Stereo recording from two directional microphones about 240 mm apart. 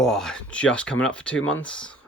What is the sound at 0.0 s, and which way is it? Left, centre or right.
Speech, centre.